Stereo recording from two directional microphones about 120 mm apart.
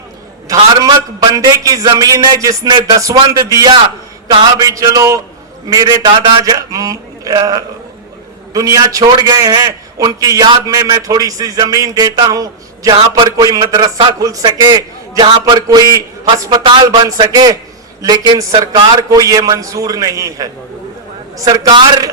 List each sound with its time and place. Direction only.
0.4 s a man's voice: 30° right (ahead or behind)